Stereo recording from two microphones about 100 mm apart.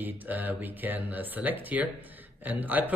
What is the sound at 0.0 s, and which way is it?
Speech, 15° right (ahead or behind).